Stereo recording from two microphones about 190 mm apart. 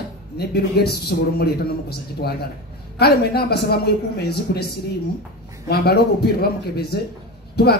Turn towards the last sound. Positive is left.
turn(degrees=55)  # may be behind; listen again after turning